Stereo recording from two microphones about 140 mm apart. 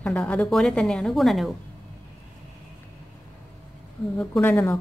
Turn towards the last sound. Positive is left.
turn(degrees=15)  # may be behind; listen again after turning